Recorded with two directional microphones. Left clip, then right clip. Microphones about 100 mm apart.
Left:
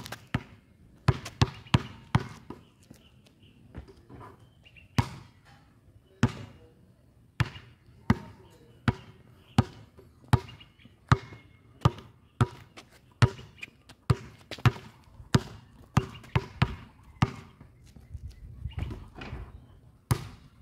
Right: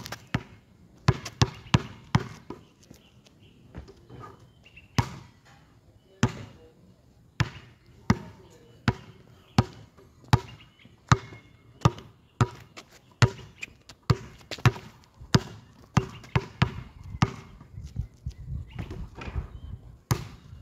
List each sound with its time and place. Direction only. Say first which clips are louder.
0.0 s basketball bounce: right 2 dB; 5° right (ahead or behind)
3.7 s a sound: right 2 dB; 5° left (ahead or behind)
5.0 s basketball bounce: right 2 dB; 5° left (ahead or behind)
6.2 s basketball bounce: right 1 dB; centre (ahead or behind)
7.4 s basketball bounce: right 2 dB; centre (ahead or behind)
9.6 s basketball bounce: right 2 dB; 20° right (ahead or behind)
10.3 s chop: right 3 dB; 30° right (ahead or behind)
11.8 s a sound: right 3 dB; 30° right (ahead or behind)
12.4 s basketball bounce: right 3 dB; 30° right (ahead or behind)
15.3 s a sound: right 3 dB; 5° right (ahead or behind)
17.2 s basketball bounce: right 2 dB; centre (ahead or behind)
18.3 s bird flight: right 9 dB; 5° left (ahead or behind)
18.8 s horse: right 1 dB; 5° left (ahead or behind)
20.1 s basketball bounce: right 2 dB; 5° left (ahead or behind)